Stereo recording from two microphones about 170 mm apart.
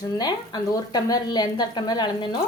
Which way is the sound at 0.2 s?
25° left (ahead or behind).